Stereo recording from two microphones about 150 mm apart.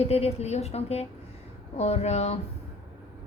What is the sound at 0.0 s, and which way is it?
A woman's voice, 45° left (ahead or behind).